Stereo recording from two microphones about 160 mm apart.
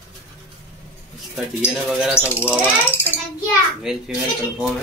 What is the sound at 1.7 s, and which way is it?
Speech, 5° right (ahead or behind).